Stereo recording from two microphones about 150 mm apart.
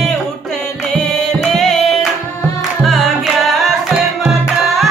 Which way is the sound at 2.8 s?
Centre (ahead or behind).